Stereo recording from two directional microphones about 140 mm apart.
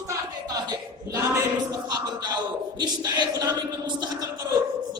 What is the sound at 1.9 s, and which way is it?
Music, 30° right (ahead or behind).